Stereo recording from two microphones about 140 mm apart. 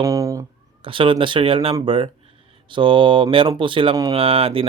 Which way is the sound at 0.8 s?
40° right (ahead or behind).